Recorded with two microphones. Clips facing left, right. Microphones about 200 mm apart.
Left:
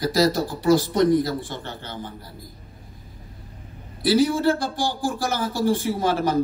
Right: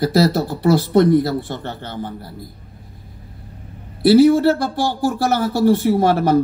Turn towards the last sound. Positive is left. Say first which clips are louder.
# right 7 dB
turn(degrees=-60)  # may be behind; listen again after turning